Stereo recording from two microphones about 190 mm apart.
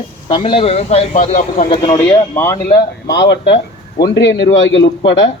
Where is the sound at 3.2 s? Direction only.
60° left (ahead or behind).